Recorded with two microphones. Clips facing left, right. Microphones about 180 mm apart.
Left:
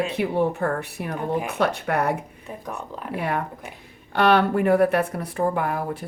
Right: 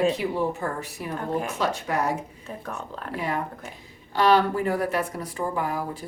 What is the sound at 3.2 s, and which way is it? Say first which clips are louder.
Speech: left 2 dB; 60° left (ahead or behind).